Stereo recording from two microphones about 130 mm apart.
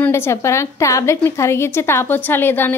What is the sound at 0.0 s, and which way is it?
A woman's voice, 20° left (ahead or behind).